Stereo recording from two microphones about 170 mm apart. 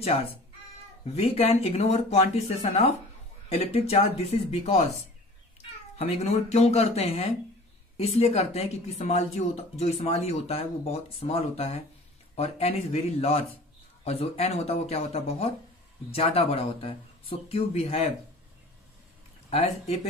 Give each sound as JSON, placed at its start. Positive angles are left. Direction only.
{"t": 1.0, "sound": "speech", "side_deg": 35}
{"t": 19.5, "sound": "speech", "side_deg": 40}